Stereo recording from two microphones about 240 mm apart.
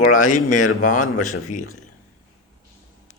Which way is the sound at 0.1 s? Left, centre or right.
Left.